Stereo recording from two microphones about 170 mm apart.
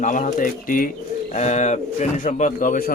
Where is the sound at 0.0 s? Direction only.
50° left (ahead or behind).